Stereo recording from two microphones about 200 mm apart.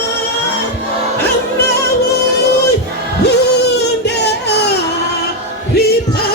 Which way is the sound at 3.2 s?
55° left (ahead or behind).